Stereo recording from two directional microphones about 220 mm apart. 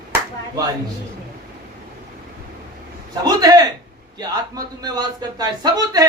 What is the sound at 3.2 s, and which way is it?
Speech, 15° right (ahead or behind).